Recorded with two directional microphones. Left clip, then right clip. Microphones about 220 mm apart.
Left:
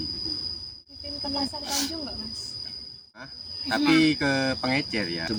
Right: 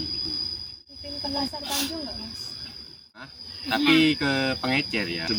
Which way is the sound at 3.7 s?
15° left (ahead or behind).